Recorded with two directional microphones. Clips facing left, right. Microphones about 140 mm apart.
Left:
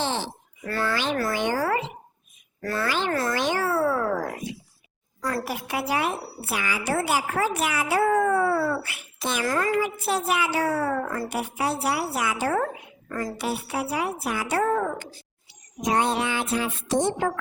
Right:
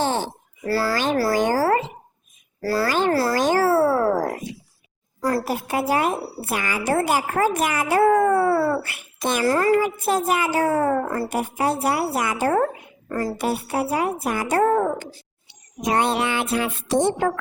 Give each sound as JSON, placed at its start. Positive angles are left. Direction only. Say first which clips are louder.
{"t": 0.0, "sound": "a sound", "louder": "right 5 dB", "side_deg": -45}
{"t": 0.7, "sound": "a child's voice", "louder": "right 5 dB", "side_deg": -35}
{"t": 2.9, "sound": "speech", "louder": "right 6 dB", "side_deg": -45}
{"t": 3.2, "sound": "cat", "louder": "right 6 dB", "side_deg": -35}
{"t": 5.2, "sound": "a woman's voice", "louder": "right 6 dB", "side_deg": -30}
{"t": 9.4, "sound": "a child's voice", "louder": "right 6 dB", "side_deg": -30}
{"t": 9.7, "sound": "a woman's voice", "louder": "right 5 dB", "side_deg": -45}
{"t": 11.0, "sound": "speech", "louder": "right 4 dB", "side_deg": -30}
{"t": 11.3, "sound": "a woman's voice", "louder": "right 4 dB", "side_deg": -45}
{"t": 13.1, "sound": "a child's voice", "louder": "right 5 dB", "side_deg": -35}
{"t": 13.3, "sound": "a woman's voice", "louder": "right 4 dB", "side_deg": -50}
{"t": 15.8, "sound": "a woman's voice", "louder": "right 2 dB", "side_deg": -65}